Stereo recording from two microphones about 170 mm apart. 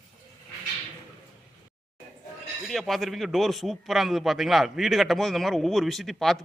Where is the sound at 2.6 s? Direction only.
Centre (ahead or behind).